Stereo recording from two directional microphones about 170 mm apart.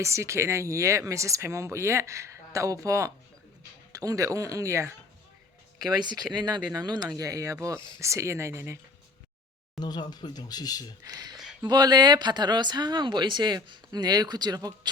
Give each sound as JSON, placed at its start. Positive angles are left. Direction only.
{"t": 0.0, "sound": "speech", "side_deg": -15}
{"t": 6.0, "sound": "speech", "side_deg": -25}
{"t": 9.7, "sound": "speech", "side_deg": 25}
{"t": 11.1, "sound": "speech", "side_deg": -25}